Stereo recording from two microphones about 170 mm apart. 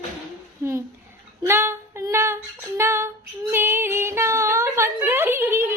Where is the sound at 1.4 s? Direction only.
15° right (ahead or behind).